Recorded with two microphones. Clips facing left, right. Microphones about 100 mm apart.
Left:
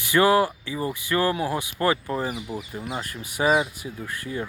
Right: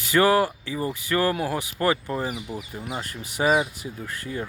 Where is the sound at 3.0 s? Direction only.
30° right (ahead or behind).